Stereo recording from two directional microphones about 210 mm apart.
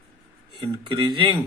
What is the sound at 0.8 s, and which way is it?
Speech, 20° right (ahead or behind).